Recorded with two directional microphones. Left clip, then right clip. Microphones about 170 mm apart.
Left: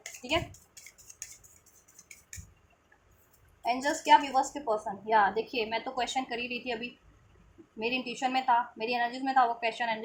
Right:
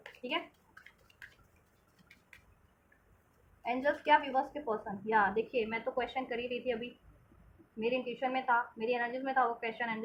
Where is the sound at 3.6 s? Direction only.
20° left (ahead or behind).